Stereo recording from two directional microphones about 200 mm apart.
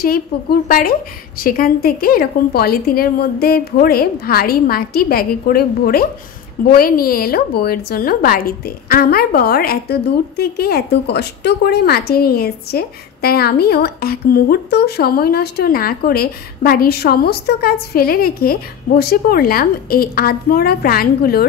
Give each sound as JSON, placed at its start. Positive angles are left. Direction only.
{"t": 0.0, "sound": "a woman's voice", "side_deg": 50}